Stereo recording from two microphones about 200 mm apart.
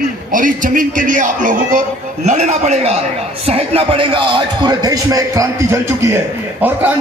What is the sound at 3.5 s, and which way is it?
A man's voice, 30° right (ahead or behind).